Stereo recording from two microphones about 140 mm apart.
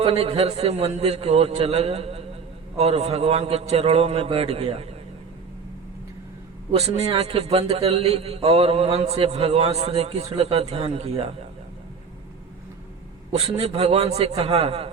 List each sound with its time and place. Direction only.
0.0 s a man's voice: 45° right (ahead or behind)
6.7 s a man's voice: 50° right (ahead or behind)
13.3 s a man's voice: 45° right (ahead or behind)